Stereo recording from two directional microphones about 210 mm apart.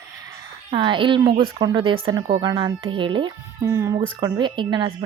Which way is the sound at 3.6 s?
10° right (ahead or behind).